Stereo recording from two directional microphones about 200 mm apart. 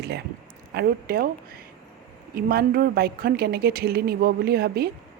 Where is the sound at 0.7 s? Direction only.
50° right (ahead or behind).